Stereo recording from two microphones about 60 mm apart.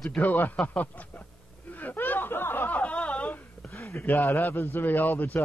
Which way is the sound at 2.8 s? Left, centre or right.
Left.